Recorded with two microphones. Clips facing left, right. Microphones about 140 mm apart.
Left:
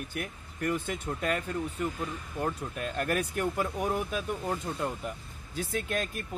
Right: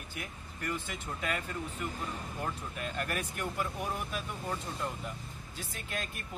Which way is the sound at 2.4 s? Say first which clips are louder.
Left 6 dB; 45° left (ahead or behind).